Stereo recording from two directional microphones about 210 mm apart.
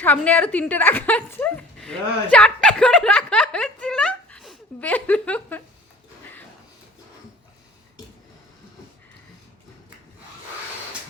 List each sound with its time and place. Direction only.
0.0 s a woman's voice: 10° left (ahead or behind)